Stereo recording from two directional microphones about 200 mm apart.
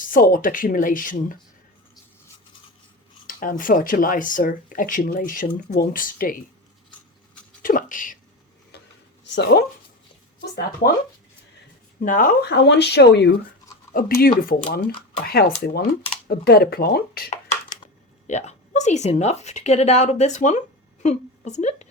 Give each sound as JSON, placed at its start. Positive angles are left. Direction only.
{"t": 0.1, "sound": "speech", "side_deg": 45}
{"t": 3.2, "sound": "speech", "side_deg": 40}
{"t": 7.6, "sound": "a sound", "side_deg": 45}
{"t": 9.2, "sound": "speech", "side_deg": 60}
{"t": 11.9, "sound": "speech", "side_deg": 40}
{"t": 17.2, "sound": "a sound", "side_deg": 25}
{"t": 18.3, "sound": "a woman's voice", "side_deg": 35}